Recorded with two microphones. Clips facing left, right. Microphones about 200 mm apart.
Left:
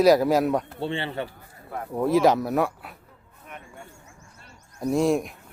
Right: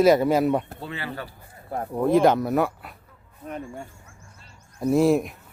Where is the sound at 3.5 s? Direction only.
35° right (ahead or behind).